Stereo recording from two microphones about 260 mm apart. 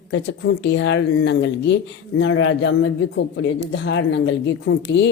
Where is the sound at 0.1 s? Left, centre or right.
Left.